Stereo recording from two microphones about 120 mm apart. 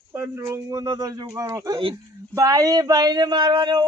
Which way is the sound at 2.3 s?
30° right (ahead or behind).